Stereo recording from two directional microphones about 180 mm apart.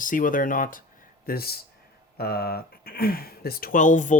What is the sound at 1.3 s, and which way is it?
Speech, 60° left (ahead or behind).